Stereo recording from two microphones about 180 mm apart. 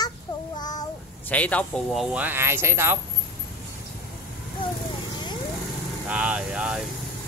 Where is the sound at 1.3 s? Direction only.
10° left (ahead or behind).